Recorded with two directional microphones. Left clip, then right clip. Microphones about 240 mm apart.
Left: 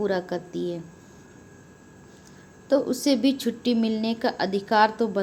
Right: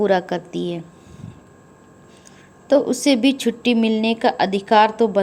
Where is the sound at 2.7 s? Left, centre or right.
Centre.